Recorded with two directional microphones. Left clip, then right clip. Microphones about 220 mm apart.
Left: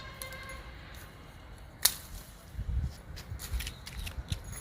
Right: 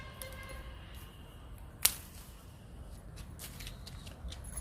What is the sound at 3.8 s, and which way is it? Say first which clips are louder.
Keys jangling: left 6 dB; 10° left (ahead or behind).